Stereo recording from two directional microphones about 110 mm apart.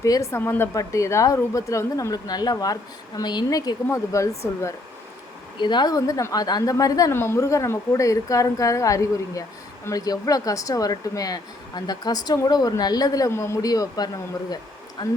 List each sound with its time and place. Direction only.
0.0 s a woman's voice: 30° left (ahead or behind)
3.8 s a woman's voice: 30° left (ahead or behind)
5.5 s speech: 45° left (ahead or behind)
7.1 s a woman's voice: 20° left (ahead or behind); by 15.1 s 40° left (ahead or behind)